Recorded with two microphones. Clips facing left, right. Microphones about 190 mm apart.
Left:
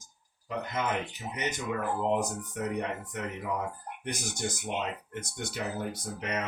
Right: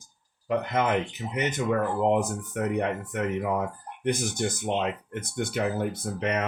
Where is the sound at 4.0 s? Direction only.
55° right (ahead or behind).